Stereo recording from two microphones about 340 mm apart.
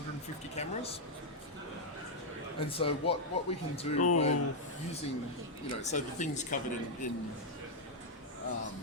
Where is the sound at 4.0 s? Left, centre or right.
Left.